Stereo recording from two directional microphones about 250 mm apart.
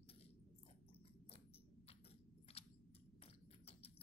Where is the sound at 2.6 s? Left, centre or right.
Left.